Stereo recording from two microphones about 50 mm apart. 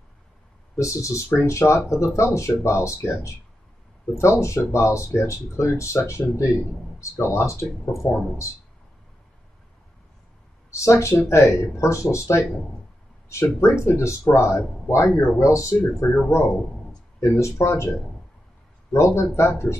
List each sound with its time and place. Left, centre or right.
0.7 s speech: left
1.4 s speech: left
1.9 s speech: left
4.4 s speech: left
10.7 s speech: left
11.8 s speech: left
13.3 s speech: left
14.9 s speech: left
16.0 s speech: left
18.9 s speech: left